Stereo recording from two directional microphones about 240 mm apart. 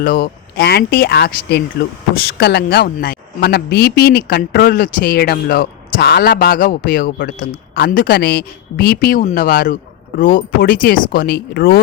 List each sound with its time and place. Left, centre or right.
0.0 s speech: left